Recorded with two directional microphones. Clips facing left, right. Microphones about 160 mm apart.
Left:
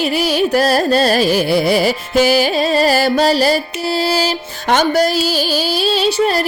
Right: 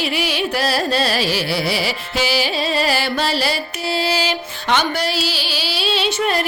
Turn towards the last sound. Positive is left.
turn(degrees=35)  # may be behind; listen again after turning